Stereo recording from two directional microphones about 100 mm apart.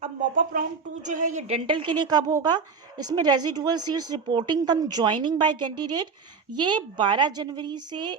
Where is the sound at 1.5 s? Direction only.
75° right (ahead or behind).